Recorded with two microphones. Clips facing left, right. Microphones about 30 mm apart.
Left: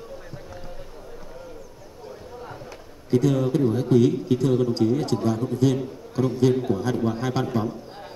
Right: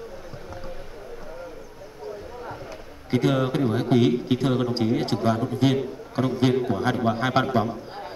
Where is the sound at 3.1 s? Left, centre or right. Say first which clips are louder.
Left 1 dB; right.